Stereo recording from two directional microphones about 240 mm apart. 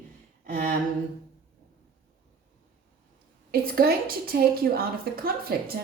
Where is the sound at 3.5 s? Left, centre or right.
Right.